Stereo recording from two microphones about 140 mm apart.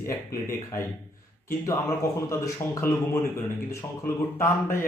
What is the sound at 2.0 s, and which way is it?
Speech, 20° left (ahead or behind).